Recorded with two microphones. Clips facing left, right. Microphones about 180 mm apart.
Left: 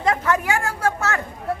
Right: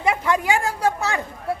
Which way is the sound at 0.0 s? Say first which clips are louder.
Even; 10° right (ahead or behind).